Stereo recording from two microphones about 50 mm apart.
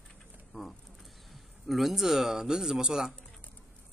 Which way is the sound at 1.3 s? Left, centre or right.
Centre.